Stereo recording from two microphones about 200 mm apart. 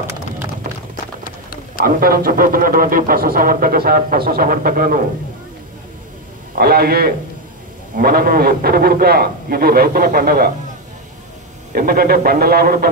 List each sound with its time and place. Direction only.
0.7 s music: 45° right (ahead or behind)
1.2 s pigeon: 45° left (ahead or behind)
1.9 s speech: 45° right (ahead or behind)
6.6 s speech: 50° right (ahead or behind)
11.7 s speech: 45° right (ahead or behind)